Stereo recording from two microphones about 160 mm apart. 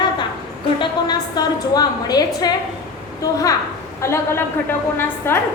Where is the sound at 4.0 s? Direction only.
15° left (ahead or behind).